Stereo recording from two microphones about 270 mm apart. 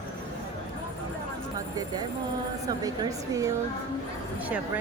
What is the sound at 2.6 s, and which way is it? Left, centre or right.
Speech, centre.